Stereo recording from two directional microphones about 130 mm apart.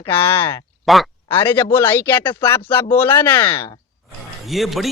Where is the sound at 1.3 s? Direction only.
20° left (ahead or behind).